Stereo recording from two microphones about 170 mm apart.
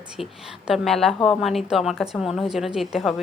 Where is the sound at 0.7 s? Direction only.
Centre (ahead or behind).